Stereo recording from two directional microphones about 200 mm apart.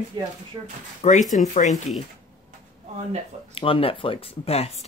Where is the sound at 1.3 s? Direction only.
35° left (ahead or behind).